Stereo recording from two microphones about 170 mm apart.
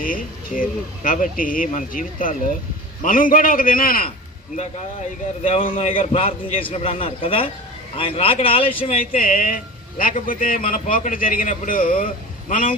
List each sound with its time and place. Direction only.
0.0 s a man's voice: 55° left (ahead or behind)
5.4 s speech: 35° left (ahead or behind)
9.0 s a man's voice: 55° left (ahead or behind)